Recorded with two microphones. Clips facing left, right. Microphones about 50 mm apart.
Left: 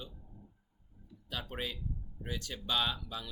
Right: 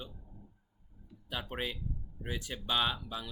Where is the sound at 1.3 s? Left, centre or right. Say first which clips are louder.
Right 2 dB; centre.